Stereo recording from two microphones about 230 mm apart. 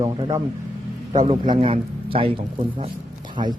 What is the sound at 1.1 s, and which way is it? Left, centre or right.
A man's voice, right.